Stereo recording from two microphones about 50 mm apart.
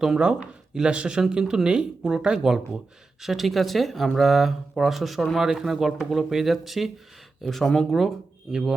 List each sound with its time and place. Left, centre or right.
0.0 s speech: centre
3.2 s speech: centre
8.5 s speech: centre